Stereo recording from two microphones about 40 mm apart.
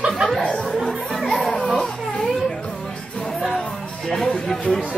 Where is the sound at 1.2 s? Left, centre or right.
Centre.